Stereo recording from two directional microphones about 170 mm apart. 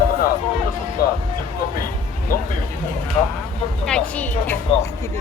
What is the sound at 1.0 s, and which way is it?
Speech, 60° left (ahead or behind).